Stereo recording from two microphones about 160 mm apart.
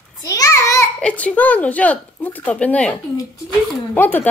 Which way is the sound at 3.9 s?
10° left (ahead or behind).